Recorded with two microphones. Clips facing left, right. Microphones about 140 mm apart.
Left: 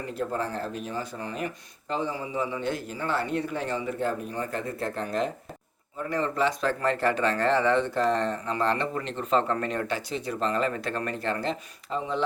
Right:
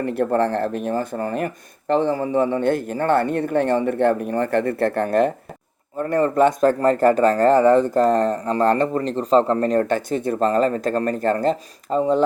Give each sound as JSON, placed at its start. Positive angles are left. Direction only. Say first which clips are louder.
{"t": 0.0, "sound": "speech", "louder": "right 10 dB", "side_deg": -65}
{"t": 6.0, "sound": "speech", "louder": "right 10 dB", "side_deg": -50}